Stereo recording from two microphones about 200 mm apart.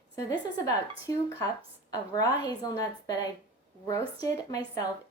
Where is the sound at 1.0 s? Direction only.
15° left (ahead or behind).